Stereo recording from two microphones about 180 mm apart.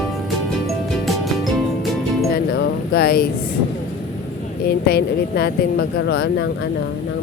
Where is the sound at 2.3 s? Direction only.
60° left (ahead or behind).